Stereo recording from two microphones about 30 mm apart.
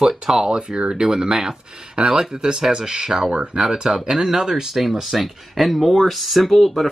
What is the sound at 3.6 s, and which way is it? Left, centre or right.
Speech, right.